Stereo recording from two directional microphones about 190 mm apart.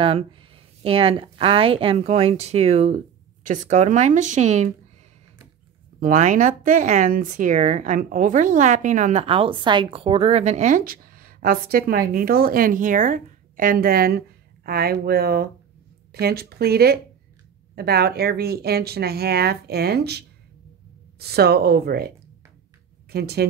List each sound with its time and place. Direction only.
0.8 s speech: 30° right (ahead or behind)
5.9 s speech: 45° right (ahead or behind)
23.1 s speech: 55° right (ahead or behind)